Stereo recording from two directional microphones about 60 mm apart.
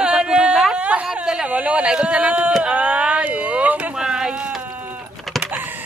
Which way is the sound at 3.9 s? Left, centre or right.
Centre.